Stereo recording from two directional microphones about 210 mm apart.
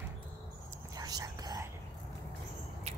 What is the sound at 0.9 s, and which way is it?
Whispering, 20° right (ahead or behind).